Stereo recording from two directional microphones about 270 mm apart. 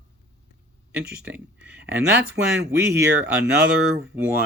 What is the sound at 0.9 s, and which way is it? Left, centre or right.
Speech, centre.